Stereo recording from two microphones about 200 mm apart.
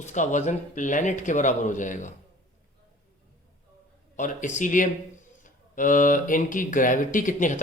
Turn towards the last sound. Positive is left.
turn(degrees=40)  # may be behind; listen again after turning